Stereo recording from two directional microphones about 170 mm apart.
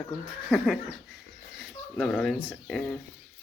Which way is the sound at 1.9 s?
5° left (ahead or behind).